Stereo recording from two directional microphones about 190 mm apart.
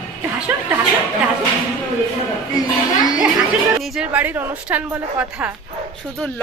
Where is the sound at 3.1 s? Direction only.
5° right (ahead or behind).